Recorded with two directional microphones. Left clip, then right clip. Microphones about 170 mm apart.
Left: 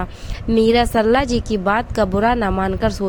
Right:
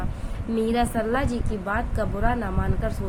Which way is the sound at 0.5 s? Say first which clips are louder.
Left 9 dB; 60° left (ahead or behind).